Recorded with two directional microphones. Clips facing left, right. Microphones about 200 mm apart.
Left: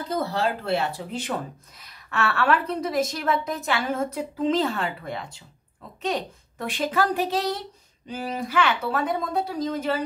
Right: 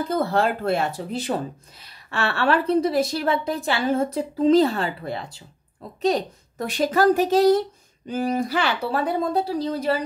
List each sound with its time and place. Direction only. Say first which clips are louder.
0.1 s a woman's voice: right 2 dB; 55° right (ahead or behind); by 9.9 s 35° right (ahead or behind)